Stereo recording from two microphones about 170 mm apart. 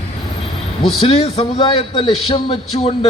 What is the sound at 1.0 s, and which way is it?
A man's voice, 35° left (ahead or behind).